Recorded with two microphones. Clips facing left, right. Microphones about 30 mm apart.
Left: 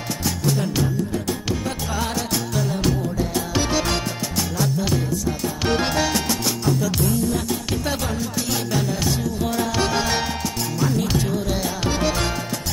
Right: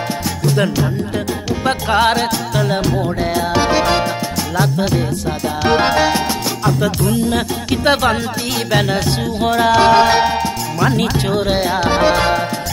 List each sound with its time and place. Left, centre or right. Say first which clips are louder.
1.7 s music: right 12 dB; right
3.6 s music: right 9 dB; right
5.7 s music: right 8 dB; right
6.8 s music: right 5 dB; right
10.8 s music: right 6 dB; right
11.9 s music: right 9 dB; right